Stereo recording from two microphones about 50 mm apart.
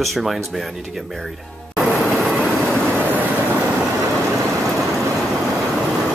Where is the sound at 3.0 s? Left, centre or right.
Right.